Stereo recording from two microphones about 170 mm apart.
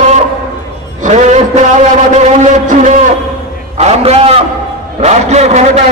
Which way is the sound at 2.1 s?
45° right (ahead or behind).